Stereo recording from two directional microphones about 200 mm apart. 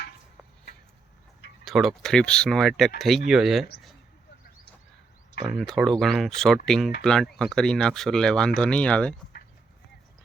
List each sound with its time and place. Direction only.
1.6 s speech: centre (ahead or behind)
5.4 s speech: centre (ahead or behind)